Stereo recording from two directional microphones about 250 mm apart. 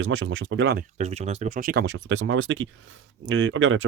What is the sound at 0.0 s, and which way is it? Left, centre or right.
Speech, right.